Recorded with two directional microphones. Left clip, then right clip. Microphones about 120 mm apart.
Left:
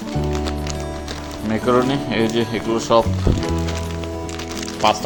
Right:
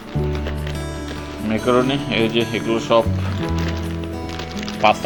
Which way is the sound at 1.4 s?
30° left (ahead or behind).